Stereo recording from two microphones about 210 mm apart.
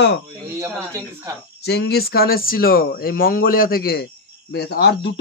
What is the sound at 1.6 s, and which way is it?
Speech, 50° left (ahead or behind).